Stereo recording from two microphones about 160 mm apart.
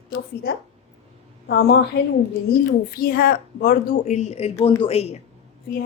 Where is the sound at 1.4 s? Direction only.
85° left.